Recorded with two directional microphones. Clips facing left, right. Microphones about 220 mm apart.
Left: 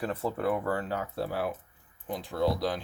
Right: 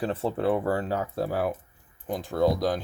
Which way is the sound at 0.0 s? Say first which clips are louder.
Right 4 dB; 30° right (ahead or behind).